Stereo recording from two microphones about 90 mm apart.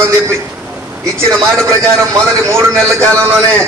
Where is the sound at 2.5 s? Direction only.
30° right (ahead or behind).